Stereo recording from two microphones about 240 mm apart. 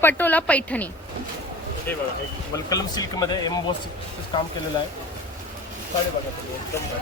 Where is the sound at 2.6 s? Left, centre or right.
Centre.